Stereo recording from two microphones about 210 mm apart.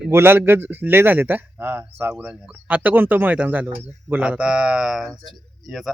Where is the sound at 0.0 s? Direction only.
10° right (ahead or behind).